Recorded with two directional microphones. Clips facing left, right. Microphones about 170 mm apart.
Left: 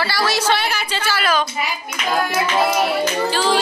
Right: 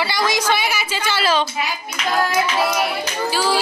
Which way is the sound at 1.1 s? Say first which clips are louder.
Right 1 dB; 25° right (ahead or behind).